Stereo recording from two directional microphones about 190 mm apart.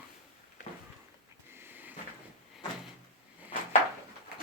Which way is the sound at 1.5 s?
10° right (ahead or behind).